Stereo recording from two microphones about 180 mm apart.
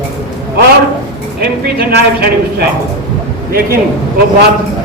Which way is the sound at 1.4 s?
60° right (ahead or behind).